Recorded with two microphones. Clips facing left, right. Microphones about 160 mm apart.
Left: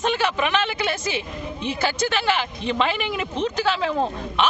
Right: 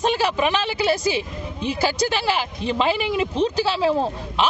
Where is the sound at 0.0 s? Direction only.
35° right (ahead or behind).